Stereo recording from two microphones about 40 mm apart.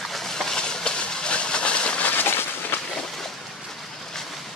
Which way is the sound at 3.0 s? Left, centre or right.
Centre.